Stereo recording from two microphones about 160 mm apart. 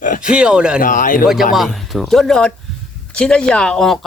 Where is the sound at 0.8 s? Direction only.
55° left (ahead or behind).